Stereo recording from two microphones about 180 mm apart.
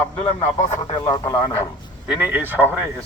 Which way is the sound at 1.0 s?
20° left (ahead or behind).